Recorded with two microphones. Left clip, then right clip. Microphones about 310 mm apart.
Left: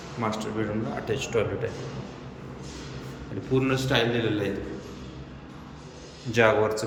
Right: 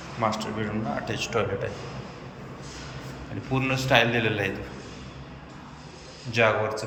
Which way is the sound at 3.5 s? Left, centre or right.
Centre.